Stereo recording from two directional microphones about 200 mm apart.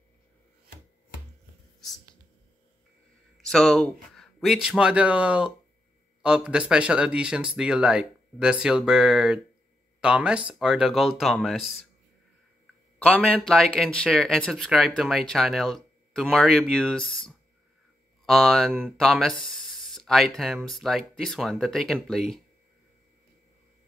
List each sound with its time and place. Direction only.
3.3 s speech: centre (ahead or behind)
13.0 s speech: 5° left (ahead or behind)